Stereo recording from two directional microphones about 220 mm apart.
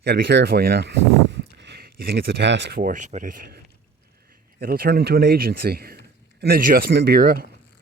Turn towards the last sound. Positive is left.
turn(degrees=-40)  # may be behind; listen again after turning